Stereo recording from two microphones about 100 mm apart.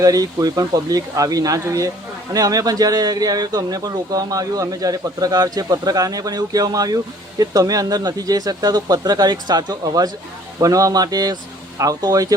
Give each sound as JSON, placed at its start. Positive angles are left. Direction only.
{"t": 0.0, "sound": "a man's voice", "side_deg": -35}